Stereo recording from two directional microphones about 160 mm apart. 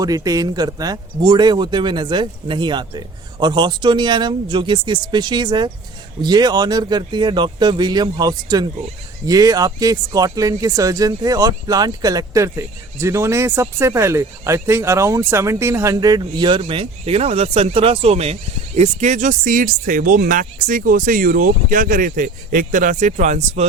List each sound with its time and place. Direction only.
0.0 s speech: 20° right (ahead or behind); by 23.6 s 45° right (ahead or behind)